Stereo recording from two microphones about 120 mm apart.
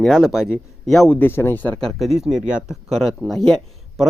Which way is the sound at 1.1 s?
15° left (ahead or behind).